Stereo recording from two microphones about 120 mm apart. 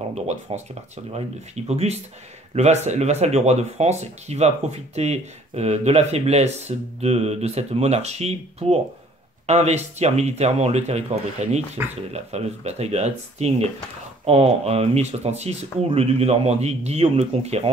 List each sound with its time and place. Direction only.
0.1 s speech: 65° right (ahead or behind)